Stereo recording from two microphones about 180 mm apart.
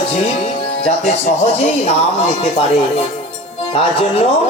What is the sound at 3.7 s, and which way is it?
Music, 35° left (ahead or behind).